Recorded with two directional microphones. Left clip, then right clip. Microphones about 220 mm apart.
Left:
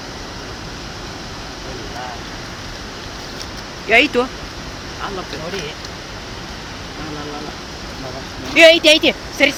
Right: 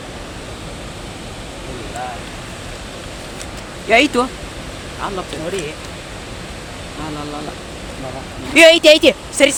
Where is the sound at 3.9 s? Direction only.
15° right (ahead or behind).